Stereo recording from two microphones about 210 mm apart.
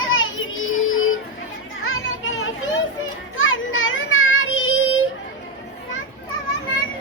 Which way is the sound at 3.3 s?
70° left (ahead or behind).